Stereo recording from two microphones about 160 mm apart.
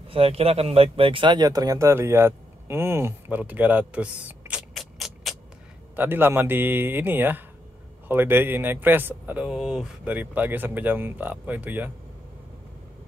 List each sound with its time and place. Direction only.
0.1 s speech: 35° right (ahead or behind); by 5.3 s centre (ahead or behind)
5.9 s speech: 15° right (ahead or behind)